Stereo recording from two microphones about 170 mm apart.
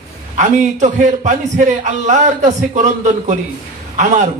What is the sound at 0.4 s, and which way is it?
A man's voice, 45° right (ahead or behind).